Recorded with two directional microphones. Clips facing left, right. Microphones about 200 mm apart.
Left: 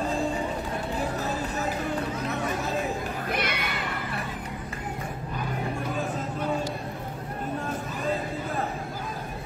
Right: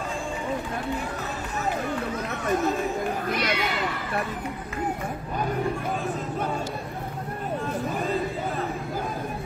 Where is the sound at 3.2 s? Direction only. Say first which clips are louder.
Right 3 dB; 55° left (ahead or behind).